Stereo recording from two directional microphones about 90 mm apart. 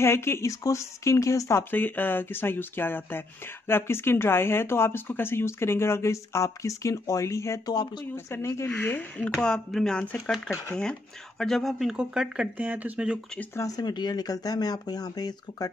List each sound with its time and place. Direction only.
0.0 s speech: 30° left (ahead or behind)
1.6 s speech: 20° left (ahead or behind); by 13.2 s 15° right (ahead or behind)
13.6 s speech: 50° left (ahead or behind)